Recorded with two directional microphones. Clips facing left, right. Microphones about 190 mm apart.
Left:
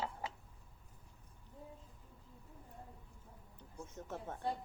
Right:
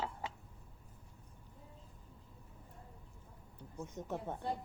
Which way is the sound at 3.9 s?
15° right (ahead or behind).